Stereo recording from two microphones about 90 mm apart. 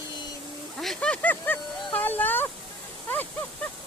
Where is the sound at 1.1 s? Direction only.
20° left (ahead or behind).